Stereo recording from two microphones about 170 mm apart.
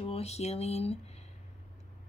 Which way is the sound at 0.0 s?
35° left (ahead or behind).